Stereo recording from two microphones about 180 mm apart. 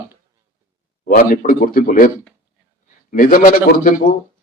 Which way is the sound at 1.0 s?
50° left (ahead or behind).